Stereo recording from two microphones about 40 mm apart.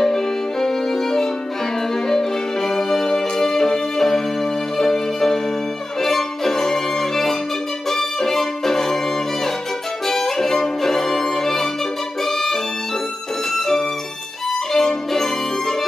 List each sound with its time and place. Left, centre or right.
0.0 s music: centre
5.9 s violin: centre
7.9 s music: centre
10.0 s violin: centre
13.5 s music: centre
14.7 s violin: centre